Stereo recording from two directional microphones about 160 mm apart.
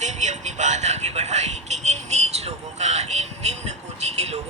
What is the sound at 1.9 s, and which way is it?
Vehicle, 45° right (ahead or behind).